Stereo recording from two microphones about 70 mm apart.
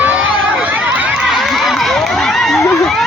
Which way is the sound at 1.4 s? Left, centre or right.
Centre.